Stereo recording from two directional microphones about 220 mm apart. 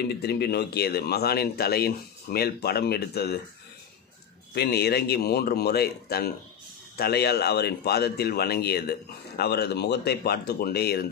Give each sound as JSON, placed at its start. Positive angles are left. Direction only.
{"t": 0.1, "sound": "speech", "side_deg": 45}
{"t": 4.6, "sound": "speech", "side_deg": 45}